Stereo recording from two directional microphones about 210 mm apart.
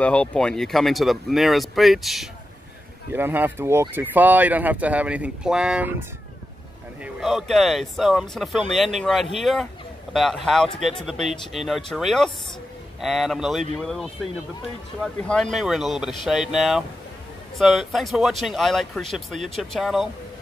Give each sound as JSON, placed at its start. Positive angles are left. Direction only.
{"t": 0.0, "sound": "speech", "side_deg": 5}
{"t": 15.2, "sound": "speech", "side_deg": 5}